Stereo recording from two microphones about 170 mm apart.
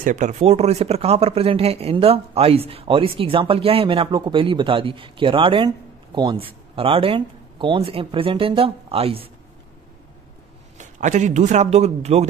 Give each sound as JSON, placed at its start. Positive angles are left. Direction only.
{"t": 0.0, "sound": "speech", "side_deg": -45}
{"t": 10.8, "sound": "a man's voice", "side_deg": -45}